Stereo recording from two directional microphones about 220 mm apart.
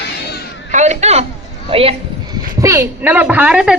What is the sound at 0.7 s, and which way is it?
A woman's voice, 30° right (ahead or behind).